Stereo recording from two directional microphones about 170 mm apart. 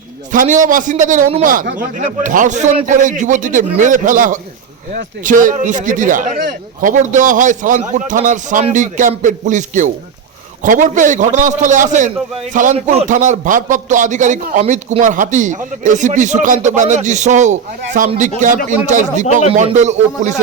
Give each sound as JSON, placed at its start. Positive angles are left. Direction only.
{"t": 0.3, "sound": "a man's voice", "side_deg": -50}